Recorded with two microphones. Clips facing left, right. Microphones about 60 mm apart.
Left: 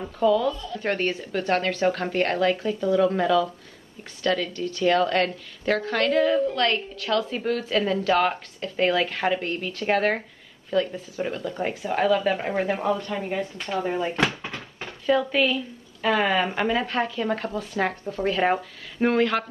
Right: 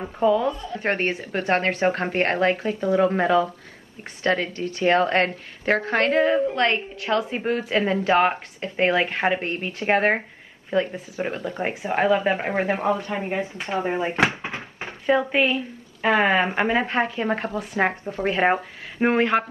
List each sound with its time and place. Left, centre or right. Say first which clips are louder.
0.0 s a woman's voice: right 1 dB; right